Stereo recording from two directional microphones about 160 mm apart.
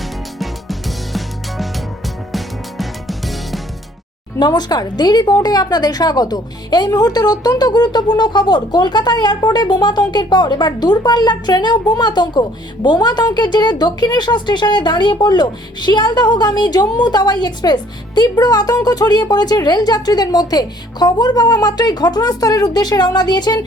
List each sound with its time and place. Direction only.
0.3 s music: centre (ahead or behind)
4.4 s a woman's voice: 25° left (ahead or behind)